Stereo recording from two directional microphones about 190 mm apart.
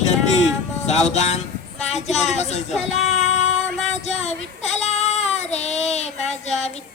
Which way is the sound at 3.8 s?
35° left (ahead or behind).